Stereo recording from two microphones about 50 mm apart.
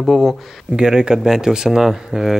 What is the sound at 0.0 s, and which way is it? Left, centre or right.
Speech, centre.